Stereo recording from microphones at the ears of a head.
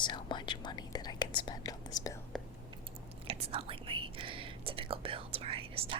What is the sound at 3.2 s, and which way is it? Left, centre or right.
Whispering, right.